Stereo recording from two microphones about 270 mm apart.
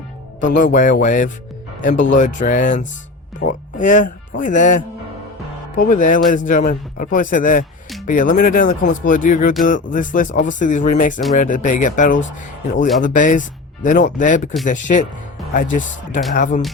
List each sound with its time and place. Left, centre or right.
0.4 s speech: left
15.5 s speech: left